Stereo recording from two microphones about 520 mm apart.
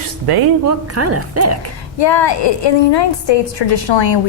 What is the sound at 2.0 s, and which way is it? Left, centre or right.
A woman's voice, left.